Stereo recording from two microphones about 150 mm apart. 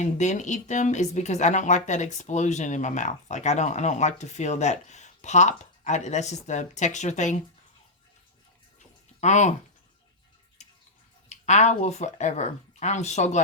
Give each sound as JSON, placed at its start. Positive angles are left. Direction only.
{"t": 0.0, "sound": "speech", "side_deg": 50}
{"t": 9.2, "sound": "speech", "side_deg": 50}
{"t": 10.6, "sound": "a sound", "side_deg": 50}
{"t": 11.3, "sound": "speech", "side_deg": 50}